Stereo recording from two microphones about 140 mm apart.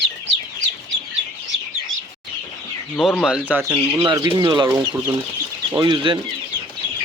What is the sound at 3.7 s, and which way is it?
Speech, 25° right (ahead or behind).